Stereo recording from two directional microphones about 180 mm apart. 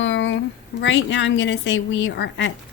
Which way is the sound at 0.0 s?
90° left.